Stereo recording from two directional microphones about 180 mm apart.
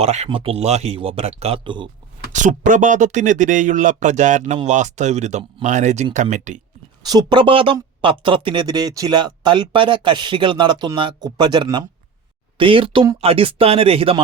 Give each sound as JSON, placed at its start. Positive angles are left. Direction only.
{"t": 0.0, "sound": "speech", "side_deg": -35}
{"t": 2.3, "sound": "speech", "side_deg": -45}
{"t": 7.0, "sound": "speech", "side_deg": -20}